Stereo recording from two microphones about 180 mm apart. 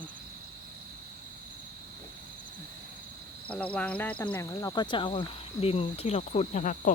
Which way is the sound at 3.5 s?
10° left (ahead or behind).